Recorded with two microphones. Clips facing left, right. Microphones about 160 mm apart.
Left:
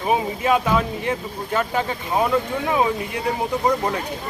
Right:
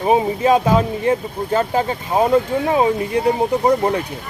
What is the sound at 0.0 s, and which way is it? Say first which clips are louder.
Speech: right 5 dB; 30° right (ahead or behind).